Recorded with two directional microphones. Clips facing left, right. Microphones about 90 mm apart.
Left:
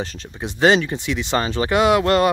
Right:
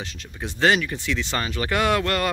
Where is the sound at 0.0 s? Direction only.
40° left (ahead or behind).